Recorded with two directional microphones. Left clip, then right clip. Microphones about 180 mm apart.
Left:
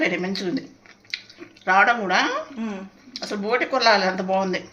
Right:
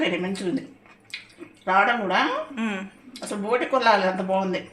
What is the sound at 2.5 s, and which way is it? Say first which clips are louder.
Speech: right 3 dB; 5° left (ahead or behind).